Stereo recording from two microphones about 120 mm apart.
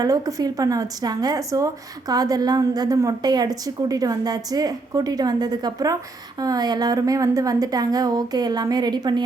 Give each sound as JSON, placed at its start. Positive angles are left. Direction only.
{"t": 0.0, "sound": "a woman's voice", "side_deg": -30}